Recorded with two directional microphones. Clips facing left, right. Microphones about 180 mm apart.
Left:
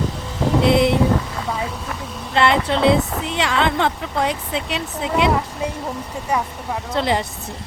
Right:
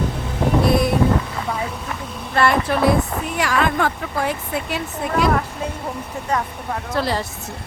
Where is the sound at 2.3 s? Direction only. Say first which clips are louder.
Even; 25° left (ahead or behind).